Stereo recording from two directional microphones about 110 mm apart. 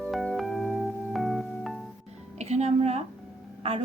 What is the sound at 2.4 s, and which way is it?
Music, 85° right.